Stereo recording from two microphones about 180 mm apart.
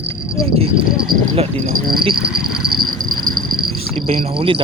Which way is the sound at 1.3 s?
35° right (ahead or behind).